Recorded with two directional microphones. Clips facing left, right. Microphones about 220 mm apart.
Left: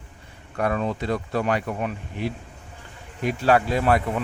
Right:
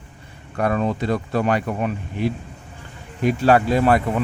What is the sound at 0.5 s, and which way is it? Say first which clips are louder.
Speech: right 3 dB; 45° right (ahead or behind).